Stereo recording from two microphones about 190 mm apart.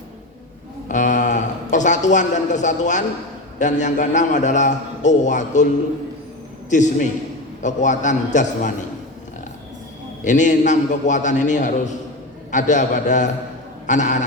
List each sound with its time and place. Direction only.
0.9 s a man's voice: 40° left (ahead or behind)
6.7 s a man's voice: 40° left (ahead or behind)
10.2 s a man's voice: 40° left (ahead or behind)